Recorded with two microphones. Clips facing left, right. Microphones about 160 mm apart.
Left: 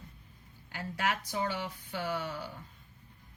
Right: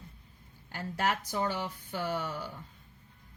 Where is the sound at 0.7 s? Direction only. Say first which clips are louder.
Right 2 dB; 40° right (ahead or behind).